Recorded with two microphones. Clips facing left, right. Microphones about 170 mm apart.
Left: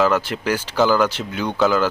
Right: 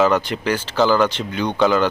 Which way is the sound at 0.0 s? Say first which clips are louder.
Right 1 dB; 5° left (ahead or behind).